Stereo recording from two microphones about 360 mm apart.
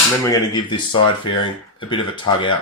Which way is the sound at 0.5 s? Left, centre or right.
Centre.